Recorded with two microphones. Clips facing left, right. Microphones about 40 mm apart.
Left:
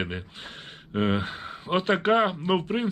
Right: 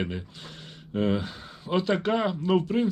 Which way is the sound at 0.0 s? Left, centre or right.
Left.